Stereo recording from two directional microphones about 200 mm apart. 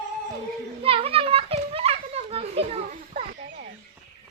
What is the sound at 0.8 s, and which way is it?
Children playing, 30° right (ahead or behind).